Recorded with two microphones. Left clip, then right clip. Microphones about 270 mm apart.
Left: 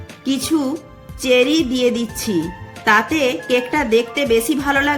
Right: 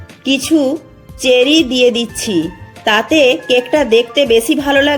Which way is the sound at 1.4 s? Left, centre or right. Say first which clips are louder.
Right 6 dB; centre.